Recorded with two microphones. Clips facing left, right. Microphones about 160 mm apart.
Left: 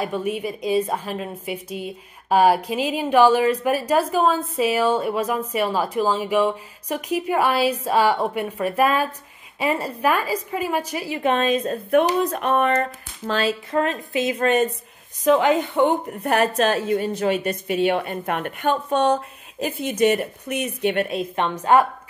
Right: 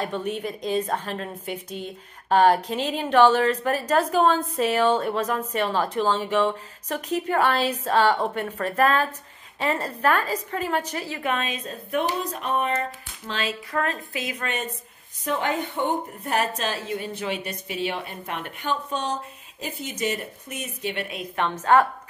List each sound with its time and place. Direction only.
0.0 s a woman's voice: 10° left (ahead or behind)
11.1 s a woman's voice: 25° left (ahead or behind)
11.4 s a woman's voice: 45° left (ahead or behind)
13.2 s speech: 45° left (ahead or behind)
13.7 s a woman's voice: 20° left (ahead or behind)
14.4 s a woman's voice: 40° left (ahead or behind)
15.2 s a woman's voice: 90° left; by 21.1 s 55° left (ahead or behind)
21.4 s a woman's voice: 10° left (ahead or behind)